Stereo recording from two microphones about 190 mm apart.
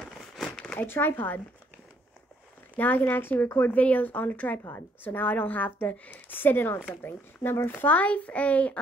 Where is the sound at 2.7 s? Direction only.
10° left (ahead or behind).